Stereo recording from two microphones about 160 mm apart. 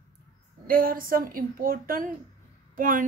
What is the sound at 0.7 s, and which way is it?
A woman's voice, 65° right (ahead or behind).